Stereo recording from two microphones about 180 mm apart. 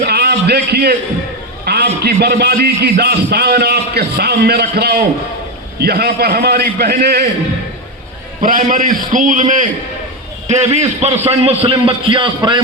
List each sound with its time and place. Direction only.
0.0 s a man's voice: 65° right (ahead or behind)
8.4 s a man's voice: 50° right (ahead or behind); by 12.6 s 25° right (ahead or behind)